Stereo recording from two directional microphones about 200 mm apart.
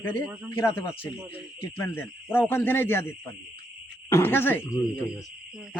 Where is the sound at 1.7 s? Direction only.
10° left (ahead or behind).